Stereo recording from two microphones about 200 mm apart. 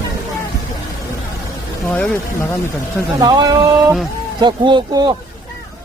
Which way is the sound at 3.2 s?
20° right (ahead or behind).